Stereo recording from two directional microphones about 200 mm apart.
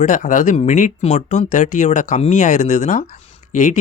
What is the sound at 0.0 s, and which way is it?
Speech, 40° left (ahead or behind).